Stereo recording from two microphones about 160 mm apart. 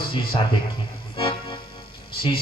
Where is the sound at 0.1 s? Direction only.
30° left (ahead or behind).